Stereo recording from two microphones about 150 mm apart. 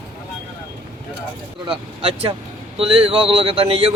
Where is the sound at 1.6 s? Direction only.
35° right (ahead or behind).